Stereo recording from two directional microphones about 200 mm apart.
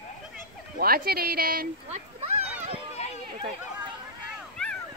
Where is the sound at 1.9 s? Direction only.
35° right (ahead or behind).